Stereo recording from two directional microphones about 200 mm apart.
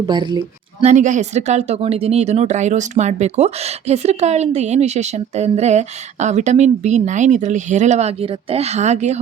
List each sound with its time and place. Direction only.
0.0 s speech: 20° right (ahead or behind)
0.9 s speech: 35° right (ahead or behind)